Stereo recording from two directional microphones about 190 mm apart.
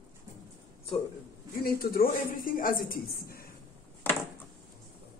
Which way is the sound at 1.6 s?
50° left (ahead or behind).